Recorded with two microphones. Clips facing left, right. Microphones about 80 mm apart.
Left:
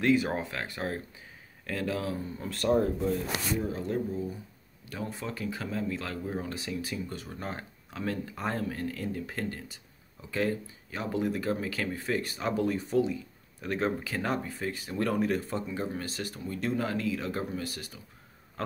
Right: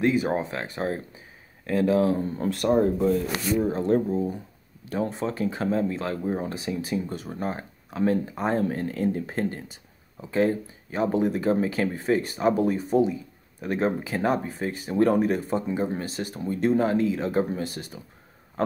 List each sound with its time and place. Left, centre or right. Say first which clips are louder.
0.0 s speech: right 3 dB; centre
2.1 s speech: right 10 dB; right
2.5 s speech: right 3 dB; centre
2.8 s speech: right 7 dB; right
4.8 s speech: right 9 dB; right